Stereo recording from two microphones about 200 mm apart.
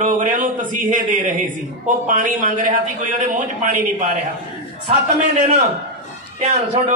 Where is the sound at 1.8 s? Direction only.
40° right (ahead or behind).